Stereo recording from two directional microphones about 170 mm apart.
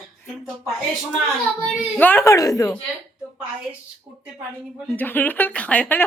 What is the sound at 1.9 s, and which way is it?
Speech, 10° left (ahead or behind).